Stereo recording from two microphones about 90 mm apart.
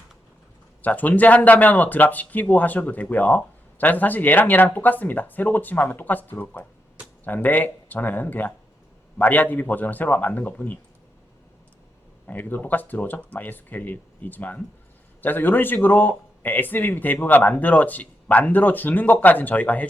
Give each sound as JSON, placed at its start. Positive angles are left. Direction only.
{"t": 0.8, "sound": "speech", "side_deg": 20}
{"t": 12.2, "sound": "speech", "side_deg": 20}